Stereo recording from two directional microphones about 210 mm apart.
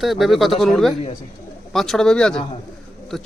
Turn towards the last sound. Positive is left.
turn(degrees=0)  # may be behind; listen again after turning